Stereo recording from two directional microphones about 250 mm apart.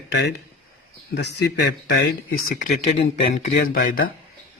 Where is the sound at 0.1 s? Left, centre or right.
Left.